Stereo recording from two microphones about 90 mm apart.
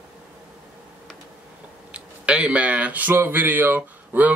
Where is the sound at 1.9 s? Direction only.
15° right (ahead or behind).